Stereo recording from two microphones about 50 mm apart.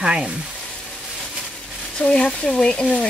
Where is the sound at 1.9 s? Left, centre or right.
Left.